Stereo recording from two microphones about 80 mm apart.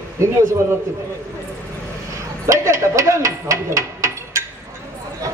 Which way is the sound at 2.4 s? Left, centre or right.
Right.